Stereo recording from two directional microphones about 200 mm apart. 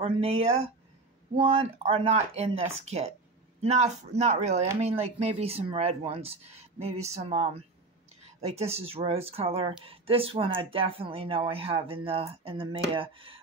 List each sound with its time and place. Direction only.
0.0 s speech: 30° right (ahead or behind)